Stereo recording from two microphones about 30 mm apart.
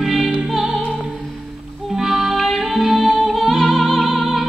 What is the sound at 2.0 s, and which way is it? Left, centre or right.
Music, centre.